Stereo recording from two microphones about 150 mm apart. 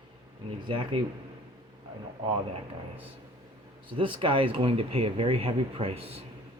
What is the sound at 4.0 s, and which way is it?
Speech, 35° right (ahead or behind).